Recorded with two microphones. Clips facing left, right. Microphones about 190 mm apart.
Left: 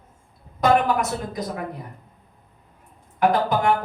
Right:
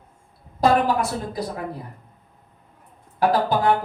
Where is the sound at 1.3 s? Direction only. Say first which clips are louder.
Right 1 dB; 30° right (ahead or behind).